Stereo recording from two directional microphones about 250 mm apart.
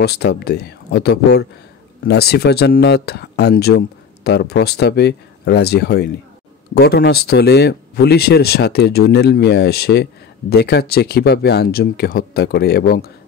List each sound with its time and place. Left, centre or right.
0.0 s speech: left